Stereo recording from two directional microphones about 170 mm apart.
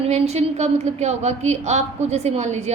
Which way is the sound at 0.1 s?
40° right (ahead or behind).